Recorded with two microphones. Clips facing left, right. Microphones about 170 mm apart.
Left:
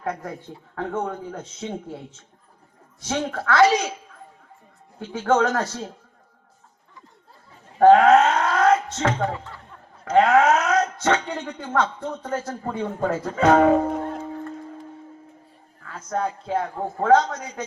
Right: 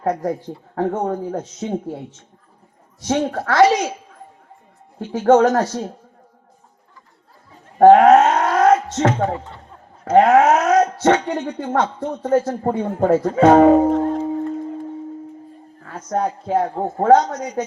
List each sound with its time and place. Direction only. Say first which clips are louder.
0.0 s a woman's voice: right 9 dB; 35° right (ahead or behind)
3.1 s a woman's voice: right 4 dB; 30° right (ahead or behind)
5.1 s a woman's voice: right 7 dB; 30° right (ahead or behind)
7.8 s a sound: right 4 dB; 30° right (ahead or behind)
8.7 s a woman's voice: right 5 dB; 25° right (ahead or behind)
15.8 s a woman's voice: right 4 dB; 30° right (ahead or behind)